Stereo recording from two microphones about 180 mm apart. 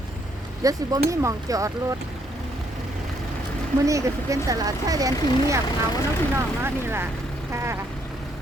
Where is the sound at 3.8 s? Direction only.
20° right (ahead or behind).